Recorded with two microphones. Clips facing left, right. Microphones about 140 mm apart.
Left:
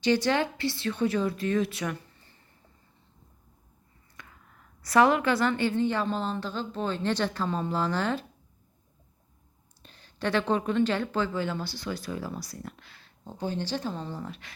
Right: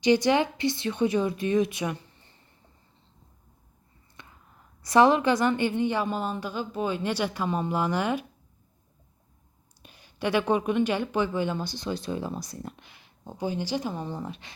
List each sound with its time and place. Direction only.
0.0 s speech: 15° right (ahead or behind)
4.2 s a sound: 25° right (ahead or behind)
4.9 s speech: 20° right (ahead or behind)
9.8 s speech: 10° right (ahead or behind)